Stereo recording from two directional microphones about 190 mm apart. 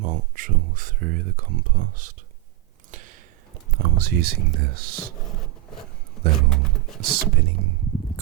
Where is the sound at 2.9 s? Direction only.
40° right (ahead or behind).